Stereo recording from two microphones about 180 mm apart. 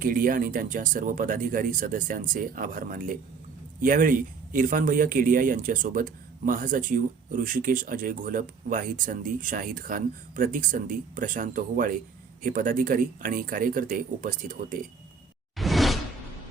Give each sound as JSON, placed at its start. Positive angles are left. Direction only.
{"t": 0.0, "sound": "speech", "side_deg": -50}
{"t": 15.5, "sound": "whoosh", "side_deg": 0}